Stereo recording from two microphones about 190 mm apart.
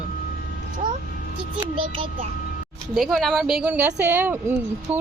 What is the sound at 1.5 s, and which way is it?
Speech, 25° right (ahead or behind).